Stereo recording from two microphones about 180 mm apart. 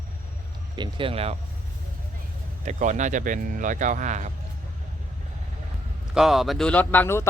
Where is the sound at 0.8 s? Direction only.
30° right (ahead or behind).